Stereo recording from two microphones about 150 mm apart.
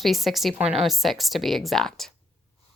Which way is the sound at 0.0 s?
Centre (ahead or behind).